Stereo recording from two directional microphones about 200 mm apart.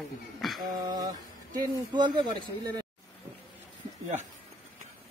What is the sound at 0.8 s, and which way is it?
Mantra, 20° right (ahead or behind).